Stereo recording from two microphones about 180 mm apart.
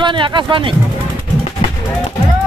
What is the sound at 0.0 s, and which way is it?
Speech, 25° right (ahead or behind).